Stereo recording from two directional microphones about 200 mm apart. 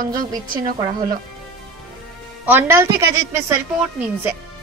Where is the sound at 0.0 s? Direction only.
45° right (ahead or behind).